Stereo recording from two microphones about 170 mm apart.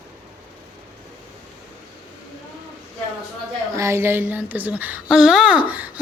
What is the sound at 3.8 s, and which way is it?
Speech, 15° right (ahead or behind).